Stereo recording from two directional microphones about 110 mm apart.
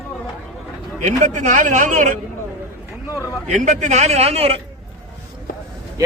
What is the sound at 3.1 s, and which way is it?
Speech, 25° left (ahead or behind).